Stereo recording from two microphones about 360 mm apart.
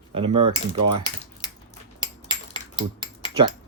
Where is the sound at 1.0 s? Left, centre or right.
Centre.